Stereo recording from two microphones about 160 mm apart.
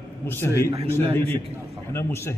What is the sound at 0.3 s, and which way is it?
Speech, 15° left (ahead or behind).